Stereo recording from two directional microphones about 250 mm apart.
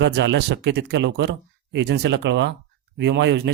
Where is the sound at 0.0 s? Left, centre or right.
Right.